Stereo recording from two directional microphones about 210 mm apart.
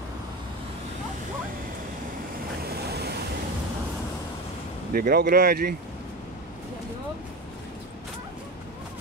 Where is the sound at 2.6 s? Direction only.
50° right (ahead or behind).